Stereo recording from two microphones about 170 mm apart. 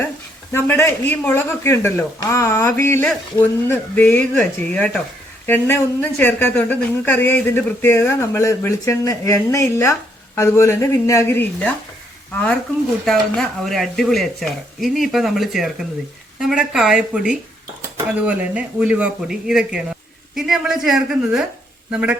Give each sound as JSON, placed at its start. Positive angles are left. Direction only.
{"t": 0.5, "sound": "speech", "side_deg": 15}
{"t": 13.1, "sound": "speech", "side_deg": 0}